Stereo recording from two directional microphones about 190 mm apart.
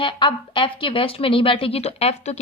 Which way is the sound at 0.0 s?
25° left (ahead or behind).